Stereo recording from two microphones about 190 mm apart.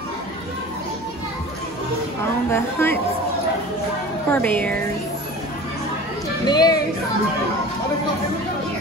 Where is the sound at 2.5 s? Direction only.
10° left (ahead or behind).